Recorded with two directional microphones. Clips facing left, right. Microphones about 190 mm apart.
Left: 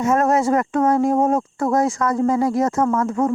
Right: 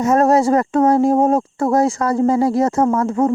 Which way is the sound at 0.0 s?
35° right (ahead or behind).